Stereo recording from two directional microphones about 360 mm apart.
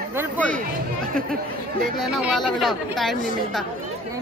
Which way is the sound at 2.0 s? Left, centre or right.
Centre.